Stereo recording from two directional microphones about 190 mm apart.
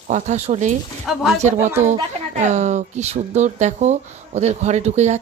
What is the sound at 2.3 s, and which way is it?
Speech, 40° right (ahead or behind).